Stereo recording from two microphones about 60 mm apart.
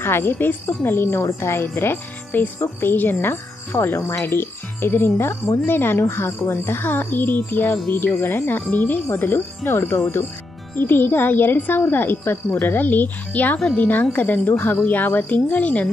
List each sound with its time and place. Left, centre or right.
0.0 s speech: left